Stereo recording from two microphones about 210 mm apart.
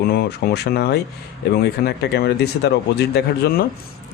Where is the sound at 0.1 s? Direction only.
50° left (ahead or behind).